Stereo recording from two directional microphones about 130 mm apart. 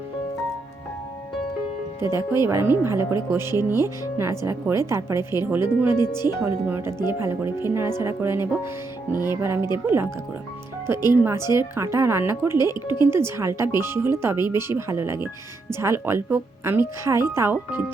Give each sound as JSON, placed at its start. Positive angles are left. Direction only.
{"t": 2.1, "sound": "speech", "side_deg": -20}
{"t": 11.1, "sound": "speech", "side_deg": -20}
{"t": 12.6, "sound": "speech", "side_deg": 35}
{"t": 13.0, "sound": "speech", "side_deg": -20}